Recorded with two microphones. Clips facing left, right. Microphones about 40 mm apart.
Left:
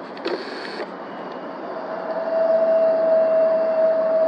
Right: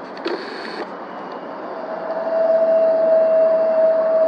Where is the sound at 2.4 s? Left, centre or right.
Centre.